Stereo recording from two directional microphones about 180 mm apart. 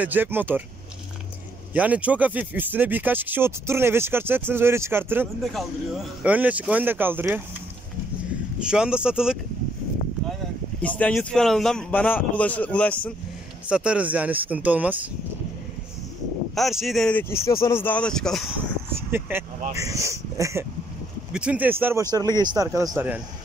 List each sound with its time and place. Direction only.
0.0 s speech: 10° right (ahead or behind)
1.7 s speech: 10° right (ahead or behind)
5.4 s speech: centre (ahead or behind)
8.5 s speech: 5° right (ahead or behind)
10.8 s a man's voice: 10° left (ahead or behind)
13.7 s speech: 5° right (ahead or behind)
16.5 s a man's voice: centre (ahead or behind)
19.1 s speech: 10° right (ahead or behind)
21.3 s speech: 5° right (ahead or behind)